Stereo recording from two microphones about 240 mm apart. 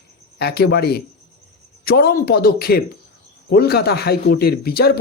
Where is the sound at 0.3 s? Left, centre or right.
Left.